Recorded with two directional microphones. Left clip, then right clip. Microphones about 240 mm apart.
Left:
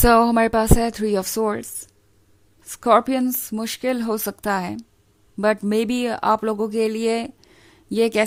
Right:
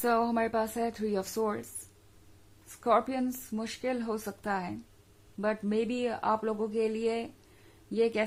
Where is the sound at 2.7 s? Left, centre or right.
Left.